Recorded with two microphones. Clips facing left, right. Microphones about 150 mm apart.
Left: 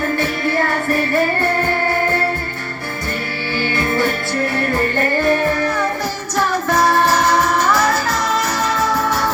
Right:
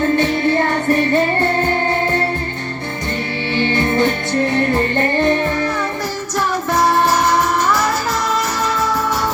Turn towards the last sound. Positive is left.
turn(degrees=-20)  # may be behind; listen again after turning